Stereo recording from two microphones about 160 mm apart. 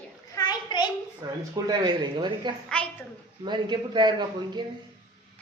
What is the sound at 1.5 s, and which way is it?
A man's voice, 25° right (ahead or behind).